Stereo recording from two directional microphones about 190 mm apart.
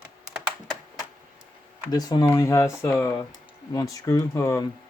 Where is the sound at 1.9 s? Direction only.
20° left (ahead or behind).